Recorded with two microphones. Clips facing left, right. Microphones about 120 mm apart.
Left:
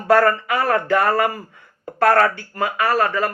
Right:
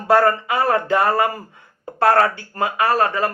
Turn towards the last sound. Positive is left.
turn(degrees=-30)  # may be behind; listen again after turning